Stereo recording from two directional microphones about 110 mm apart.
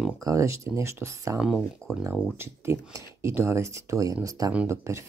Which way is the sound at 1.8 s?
10° left (ahead or behind).